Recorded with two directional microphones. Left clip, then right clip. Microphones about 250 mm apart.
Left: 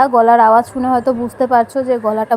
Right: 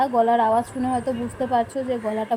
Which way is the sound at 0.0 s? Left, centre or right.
Left.